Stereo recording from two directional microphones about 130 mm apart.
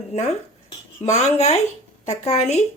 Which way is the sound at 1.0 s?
60° left (ahead or behind).